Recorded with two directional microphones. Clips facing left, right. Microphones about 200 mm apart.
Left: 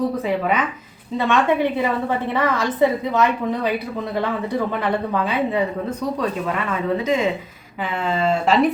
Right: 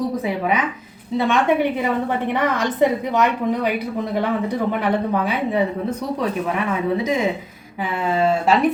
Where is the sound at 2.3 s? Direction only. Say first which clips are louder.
Even; 15° right (ahead or behind).